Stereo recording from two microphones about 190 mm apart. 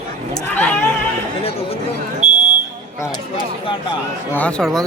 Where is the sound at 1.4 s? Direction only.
30° left (ahead or behind).